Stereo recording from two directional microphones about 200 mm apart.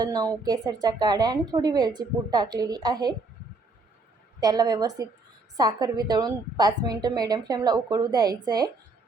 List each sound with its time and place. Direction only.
0.0 s a woman's voice: 20° right (ahead or behind)
4.4 s a woman's voice: 20° right (ahead or behind)